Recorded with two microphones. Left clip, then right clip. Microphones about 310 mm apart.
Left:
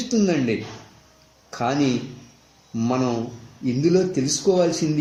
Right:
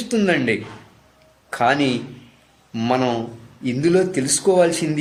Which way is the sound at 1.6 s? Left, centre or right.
Right.